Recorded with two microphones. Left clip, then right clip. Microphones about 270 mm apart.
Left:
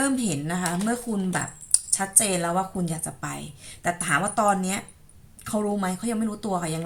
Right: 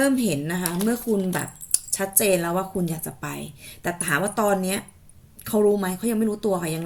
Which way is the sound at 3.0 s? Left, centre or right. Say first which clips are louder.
Right 1 dB; centre.